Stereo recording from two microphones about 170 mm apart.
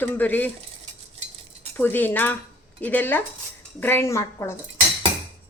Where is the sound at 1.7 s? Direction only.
10° left (ahead or behind).